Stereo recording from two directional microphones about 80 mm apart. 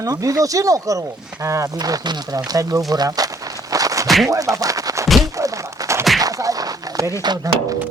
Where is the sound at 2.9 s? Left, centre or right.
Right.